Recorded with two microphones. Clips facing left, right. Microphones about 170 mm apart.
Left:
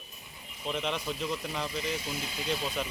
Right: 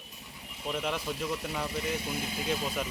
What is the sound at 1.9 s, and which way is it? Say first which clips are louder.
Speech: right 2 dB; 55° right (ahead or behind).